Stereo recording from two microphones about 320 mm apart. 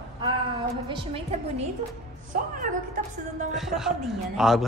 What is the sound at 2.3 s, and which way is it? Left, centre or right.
Speech, right.